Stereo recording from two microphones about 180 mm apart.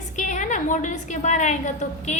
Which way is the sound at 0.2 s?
40° left (ahead or behind).